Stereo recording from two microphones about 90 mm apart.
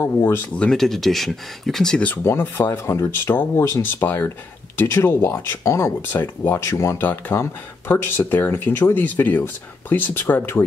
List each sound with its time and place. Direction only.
0.0 s speech: 25° left (ahead or behind)
0.6 s speech: 5° left (ahead or behind)
2.0 s speech: 25° left (ahead or behind)